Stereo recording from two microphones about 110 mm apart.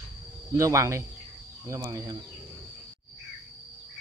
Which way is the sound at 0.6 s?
30° right (ahead or behind).